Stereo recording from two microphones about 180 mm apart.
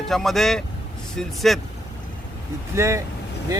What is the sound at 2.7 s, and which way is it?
Speech, 15° right (ahead or behind).